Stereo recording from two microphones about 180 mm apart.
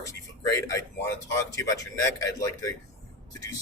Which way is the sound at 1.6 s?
20° left (ahead or behind).